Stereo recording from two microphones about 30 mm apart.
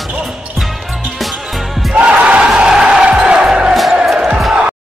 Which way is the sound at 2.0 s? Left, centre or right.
Right.